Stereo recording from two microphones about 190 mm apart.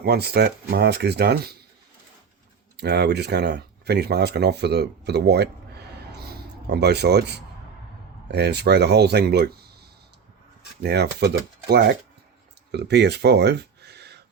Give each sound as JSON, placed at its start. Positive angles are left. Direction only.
{"t": 0.0, "sound": "speech", "side_deg": -55}
{"t": 2.7, "sound": "speech", "side_deg": -60}
{"t": 6.1, "sound": "a sound", "side_deg": -60}
{"t": 8.3, "sound": "speech", "side_deg": -60}
{"t": 10.8, "sound": "speech", "side_deg": -60}